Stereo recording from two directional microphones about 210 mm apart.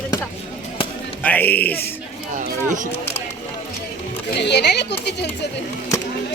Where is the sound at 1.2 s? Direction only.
10° left (ahead or behind).